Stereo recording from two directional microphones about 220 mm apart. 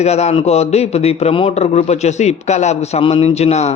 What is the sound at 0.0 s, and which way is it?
Speech, 30° left (ahead or behind).